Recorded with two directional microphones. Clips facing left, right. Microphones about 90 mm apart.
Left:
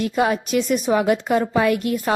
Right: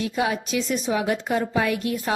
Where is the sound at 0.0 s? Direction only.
50° left (ahead or behind).